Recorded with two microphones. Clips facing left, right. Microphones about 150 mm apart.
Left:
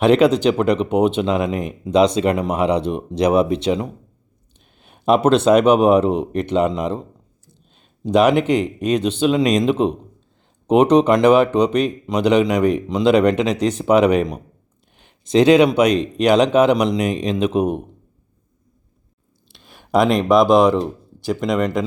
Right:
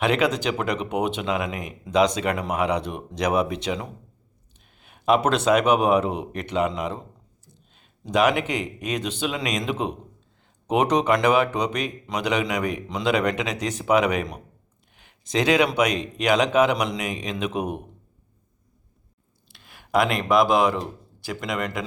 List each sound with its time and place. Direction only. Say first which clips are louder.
0.0 s speech: left 9 dB; 30° left (ahead or behind)
20.2 s speech: left 6 dB; 20° left (ahead or behind)